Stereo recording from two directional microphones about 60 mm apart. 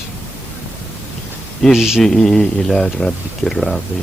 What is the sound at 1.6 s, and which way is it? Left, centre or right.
Speech, centre.